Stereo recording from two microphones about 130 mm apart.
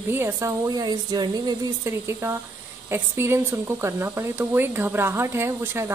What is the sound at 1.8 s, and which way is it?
Speech, 20° right (ahead or behind).